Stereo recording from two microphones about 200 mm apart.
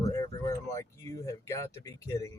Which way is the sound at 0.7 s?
15° left (ahead or behind).